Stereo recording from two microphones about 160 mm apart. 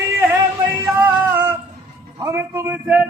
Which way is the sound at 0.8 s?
15° right (ahead or behind).